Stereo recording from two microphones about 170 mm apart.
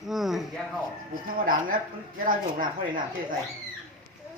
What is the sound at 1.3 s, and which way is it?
Speech, 55° right (ahead or behind).